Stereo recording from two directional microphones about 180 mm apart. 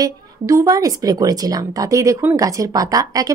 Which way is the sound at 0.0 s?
20° right (ahead or behind).